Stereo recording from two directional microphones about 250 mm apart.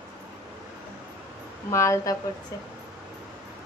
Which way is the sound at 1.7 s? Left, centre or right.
Centre.